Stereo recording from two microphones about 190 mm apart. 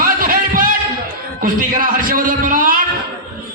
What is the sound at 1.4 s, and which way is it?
A man's voice, 45° right (ahead or behind).